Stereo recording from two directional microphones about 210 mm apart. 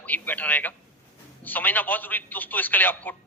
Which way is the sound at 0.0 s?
10° left (ahead or behind).